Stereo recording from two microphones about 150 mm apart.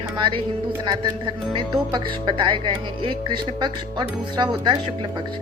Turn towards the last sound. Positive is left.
turn(degrees=-30)  # may be behind; listen again after turning